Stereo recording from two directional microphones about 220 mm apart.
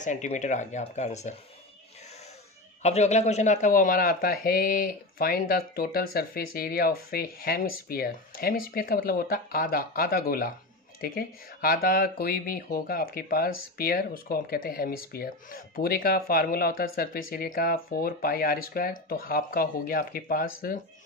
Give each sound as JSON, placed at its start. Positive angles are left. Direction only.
{"t": 0.0, "sound": "speech", "side_deg": 35}
{"t": 2.8, "sound": "speech", "side_deg": 30}